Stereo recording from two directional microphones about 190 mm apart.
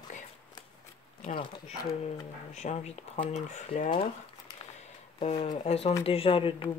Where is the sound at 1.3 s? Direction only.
25° left (ahead or behind).